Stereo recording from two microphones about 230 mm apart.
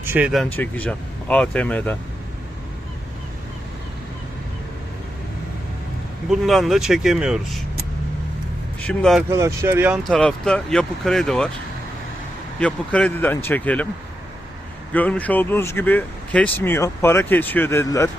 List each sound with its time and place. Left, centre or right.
0.0 s speech: centre
6.3 s speech: centre
8.9 s speech: centre
9.3 s speech: centre
12.5 s speech: centre
14.9 s speech: centre